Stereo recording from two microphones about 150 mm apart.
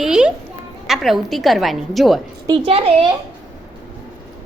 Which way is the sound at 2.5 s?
35° right (ahead or behind).